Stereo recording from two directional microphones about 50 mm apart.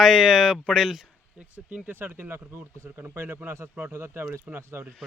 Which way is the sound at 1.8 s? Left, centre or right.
Right.